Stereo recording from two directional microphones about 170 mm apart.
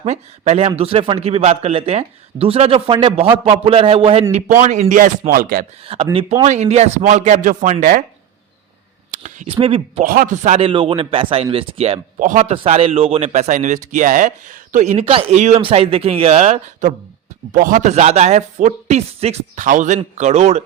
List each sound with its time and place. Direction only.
0.0 s speech: 40° right (ahead or behind)
5.8 s a man's voice: 35° right (ahead or behind)
7.8 s speech: 65° right (ahead or behind)
9.1 s a sound: 50° right (ahead or behind)
9.5 s speech: 30° right (ahead or behind)
10.0 s a man's voice: 55° right (ahead or behind)